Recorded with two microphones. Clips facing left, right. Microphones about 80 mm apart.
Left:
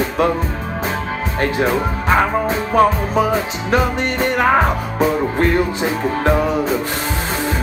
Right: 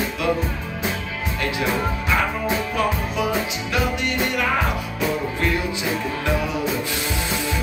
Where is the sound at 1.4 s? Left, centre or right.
Left.